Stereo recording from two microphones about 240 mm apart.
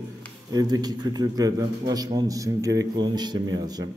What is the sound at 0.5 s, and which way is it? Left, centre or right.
A man's voice, centre.